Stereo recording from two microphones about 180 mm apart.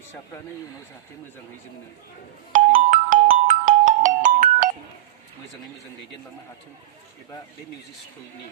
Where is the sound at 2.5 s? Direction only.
45° right (ahead or behind).